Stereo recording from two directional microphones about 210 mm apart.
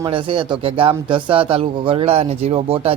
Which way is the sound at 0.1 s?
25° right (ahead or behind).